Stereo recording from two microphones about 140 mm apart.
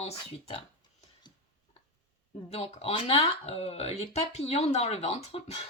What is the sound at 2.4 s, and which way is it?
Speech, 50° left (ahead or behind).